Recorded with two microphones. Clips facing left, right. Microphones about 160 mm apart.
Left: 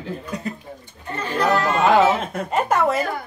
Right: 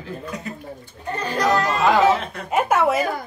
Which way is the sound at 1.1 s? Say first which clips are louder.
Even; 35° right (ahead or behind).